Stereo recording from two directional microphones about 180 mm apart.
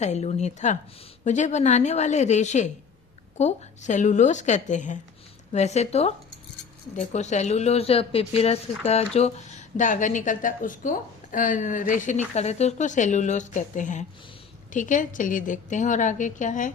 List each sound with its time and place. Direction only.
0.0 s a woman's voice: 40° left (ahead or behind)